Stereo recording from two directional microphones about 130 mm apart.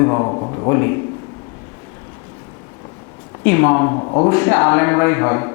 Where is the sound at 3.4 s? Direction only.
20° left (ahead or behind).